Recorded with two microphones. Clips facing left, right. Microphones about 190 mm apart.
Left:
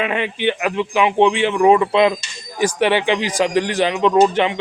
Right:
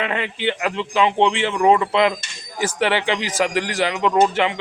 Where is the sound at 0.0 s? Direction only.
15° left (ahead or behind).